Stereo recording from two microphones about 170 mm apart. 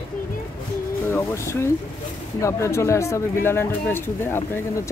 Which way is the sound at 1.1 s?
15° left (ahead or behind).